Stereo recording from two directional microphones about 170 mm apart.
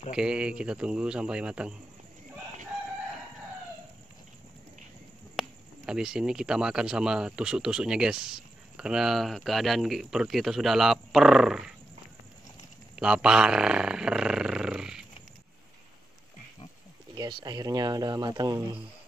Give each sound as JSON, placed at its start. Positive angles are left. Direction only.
{"t": 0.1, "sound": "speech", "side_deg": -5}
{"t": 5.3, "sound": "speech", "side_deg": 0}
{"t": 12.9, "sound": "roar", "side_deg": -5}
{"t": 17.2, "sound": "speech", "side_deg": -25}